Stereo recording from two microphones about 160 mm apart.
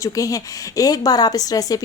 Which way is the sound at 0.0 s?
20° left (ahead or behind).